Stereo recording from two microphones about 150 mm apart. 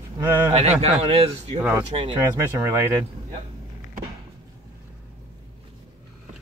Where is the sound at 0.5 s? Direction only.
45° right (ahead or behind).